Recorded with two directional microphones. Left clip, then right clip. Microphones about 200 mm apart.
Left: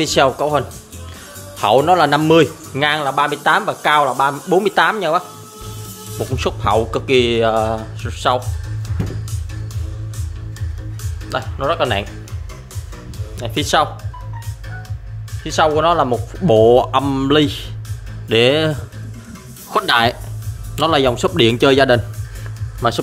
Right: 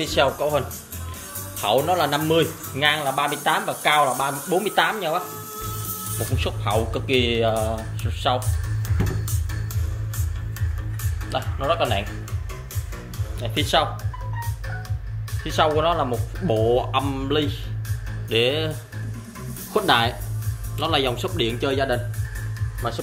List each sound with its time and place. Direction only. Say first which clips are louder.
0.0 s speech: left 6 dB; 50° left (ahead or behind)
0.4 s speech: left 5 dB; 30° left (ahead or behind)
11.3 s speech: left 4 dB; 50° left (ahead or behind)
13.4 s speech: left 5 dB; 35° left (ahead or behind)
15.4 s speech: left 6 dB; 25° left (ahead or behind); by 16.8 s 50° left (ahead or behind)
16.9 s speech: left 8 dB; 35° left (ahead or behind)
21.4 s speech: left 12 dB; 60° left (ahead or behind)